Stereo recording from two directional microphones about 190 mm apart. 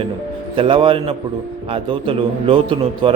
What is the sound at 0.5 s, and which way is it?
A man's voice, 30° right (ahead or behind).